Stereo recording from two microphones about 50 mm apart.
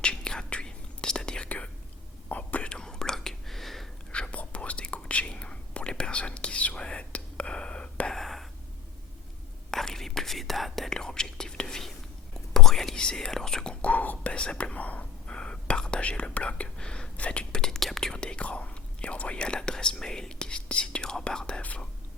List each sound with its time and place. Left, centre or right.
0.0 s whispering: centre; by 2.6 s left
2.6 s whispering: centre
4.1 s whispering: left
8.1 s whispering: centre
9.7 s whispering: centre
13.8 s whispering: left
15.3 s whispering: centre
17.5 s whispering: centre
18.2 s whispering: left
21.6 s whispering: left